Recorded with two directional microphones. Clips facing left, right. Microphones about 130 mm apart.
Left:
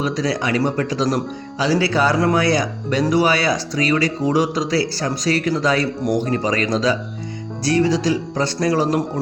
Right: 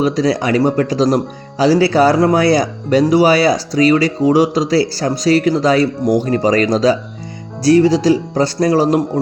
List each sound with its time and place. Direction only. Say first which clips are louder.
0.0 s speech: right 6 dB; 35° right (ahead or behind)